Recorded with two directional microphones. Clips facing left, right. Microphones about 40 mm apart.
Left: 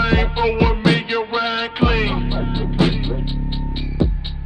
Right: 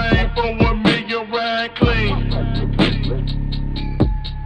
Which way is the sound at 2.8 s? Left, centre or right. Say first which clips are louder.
Right 1 dB; right.